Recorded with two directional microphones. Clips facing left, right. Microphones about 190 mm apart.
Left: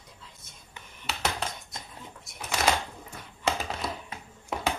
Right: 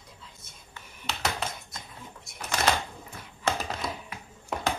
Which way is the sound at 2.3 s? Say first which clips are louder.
Even; centre (ahead or behind).